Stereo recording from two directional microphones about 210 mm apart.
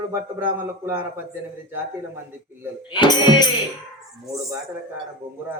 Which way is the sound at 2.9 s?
20° left (ahead or behind).